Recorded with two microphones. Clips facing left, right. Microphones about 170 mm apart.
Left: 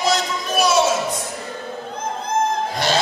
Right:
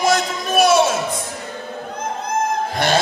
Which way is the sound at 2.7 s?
55° right (ahead or behind).